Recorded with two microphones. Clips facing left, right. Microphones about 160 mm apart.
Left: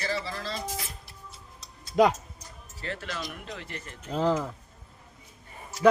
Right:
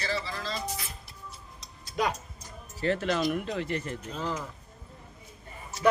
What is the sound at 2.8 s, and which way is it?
Speech, 20° right (ahead or behind).